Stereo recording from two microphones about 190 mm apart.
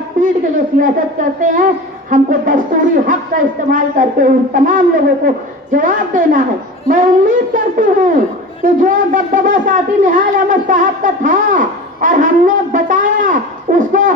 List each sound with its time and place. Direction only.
0.7 s wind instrument: 45° right (ahead or behind)